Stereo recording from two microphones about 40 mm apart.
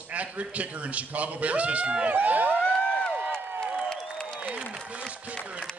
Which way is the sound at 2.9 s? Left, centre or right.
Left.